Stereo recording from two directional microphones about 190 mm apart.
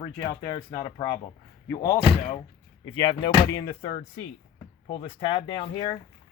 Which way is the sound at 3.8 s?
35° left (ahead or behind).